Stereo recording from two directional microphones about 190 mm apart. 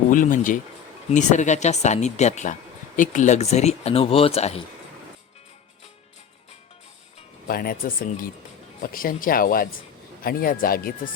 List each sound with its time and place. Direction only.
0.1 s speech: 45° left (ahead or behind)
7.4 s speech: 50° left (ahead or behind)